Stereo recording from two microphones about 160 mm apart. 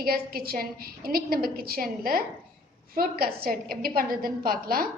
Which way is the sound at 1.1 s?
70° right (ahead or behind).